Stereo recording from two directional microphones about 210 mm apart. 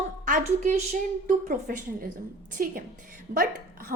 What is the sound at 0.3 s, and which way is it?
A woman's voice, 40° right (ahead or behind).